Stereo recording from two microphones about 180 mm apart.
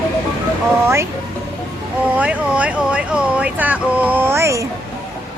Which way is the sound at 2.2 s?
5° right (ahead or behind).